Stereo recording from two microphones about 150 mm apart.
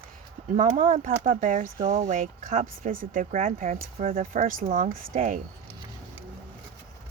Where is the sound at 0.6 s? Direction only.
60° right (ahead or behind).